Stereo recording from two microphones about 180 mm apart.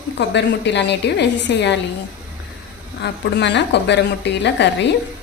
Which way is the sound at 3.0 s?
70° left (ahead or behind).